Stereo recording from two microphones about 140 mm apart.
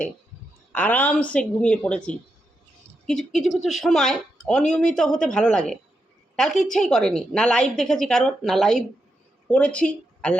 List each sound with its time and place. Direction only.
0.7 s a woman's voice: 10° left (ahead or behind)